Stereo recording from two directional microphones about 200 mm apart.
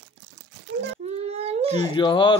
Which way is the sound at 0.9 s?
30° right (ahead or behind).